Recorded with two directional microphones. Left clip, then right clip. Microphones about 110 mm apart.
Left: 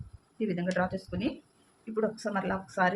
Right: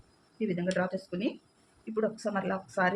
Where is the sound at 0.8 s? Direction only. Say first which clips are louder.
Even; 10° right (ahead or behind).